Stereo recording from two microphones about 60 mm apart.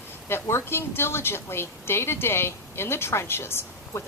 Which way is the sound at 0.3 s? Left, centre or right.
Left.